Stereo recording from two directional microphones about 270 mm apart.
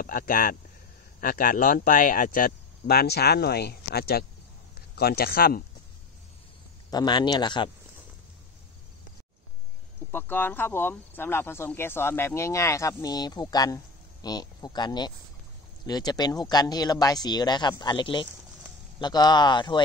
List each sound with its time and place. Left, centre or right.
0.0 s speech: left
6.9 s speech: centre
10.1 s speech: centre